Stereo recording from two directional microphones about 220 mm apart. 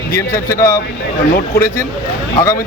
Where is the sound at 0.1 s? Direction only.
15° left (ahead or behind).